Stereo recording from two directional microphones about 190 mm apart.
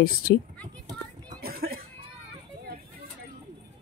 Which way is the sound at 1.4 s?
50° right (ahead or behind).